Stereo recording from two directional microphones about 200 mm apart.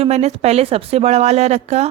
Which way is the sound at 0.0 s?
30° right (ahead or behind).